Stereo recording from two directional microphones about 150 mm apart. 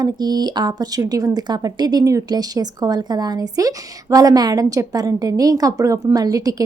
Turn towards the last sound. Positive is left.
turn(degrees=-25)  # may be behind; listen again after turning